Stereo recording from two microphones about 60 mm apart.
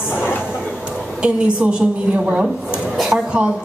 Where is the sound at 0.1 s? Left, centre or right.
Left.